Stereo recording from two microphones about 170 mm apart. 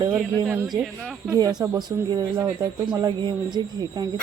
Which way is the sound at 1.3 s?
25° right (ahead or behind).